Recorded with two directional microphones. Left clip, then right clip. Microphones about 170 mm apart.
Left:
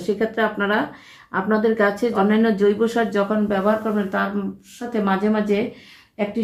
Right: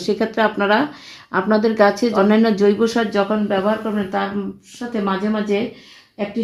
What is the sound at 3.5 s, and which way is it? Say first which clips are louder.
A woman's voice: right 1 dB; 30° right (ahead or behind).